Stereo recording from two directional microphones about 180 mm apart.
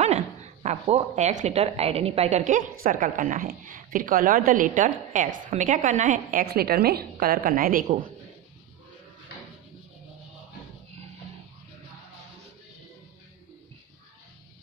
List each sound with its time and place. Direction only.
0.0 s speech: 40° right (ahead or behind)